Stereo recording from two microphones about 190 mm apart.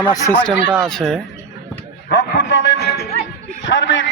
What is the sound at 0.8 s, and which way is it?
Speech, centre (ahead or behind).